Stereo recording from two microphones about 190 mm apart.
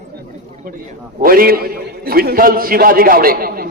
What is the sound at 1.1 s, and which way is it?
A man's voice, 50° right (ahead or behind).